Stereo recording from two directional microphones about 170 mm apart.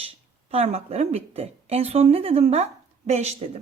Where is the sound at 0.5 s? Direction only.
35° right (ahead or behind).